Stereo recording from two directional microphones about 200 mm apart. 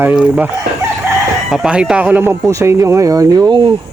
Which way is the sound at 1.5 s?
5° right (ahead or behind).